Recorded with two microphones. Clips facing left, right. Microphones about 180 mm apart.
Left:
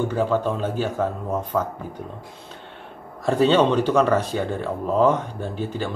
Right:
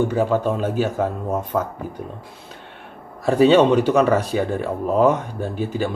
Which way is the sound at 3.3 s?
10° right (ahead or behind).